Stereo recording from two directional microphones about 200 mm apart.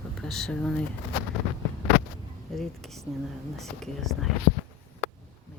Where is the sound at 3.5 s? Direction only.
Centre (ahead or behind).